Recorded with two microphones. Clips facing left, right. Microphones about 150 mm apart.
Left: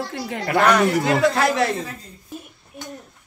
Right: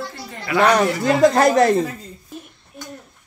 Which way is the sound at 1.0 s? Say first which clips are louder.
Right 4 dB; 40° right (ahead or behind).